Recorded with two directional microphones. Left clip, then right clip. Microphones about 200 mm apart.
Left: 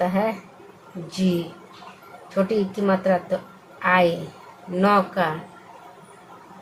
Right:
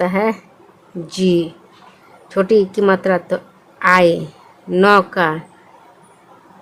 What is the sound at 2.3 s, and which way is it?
A woman's voice, 50° right (ahead or behind).